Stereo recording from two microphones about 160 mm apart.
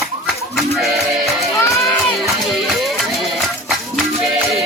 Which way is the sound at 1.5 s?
15° left (ahead or behind).